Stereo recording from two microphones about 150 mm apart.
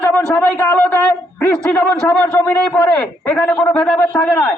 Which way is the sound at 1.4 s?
10° left (ahead or behind).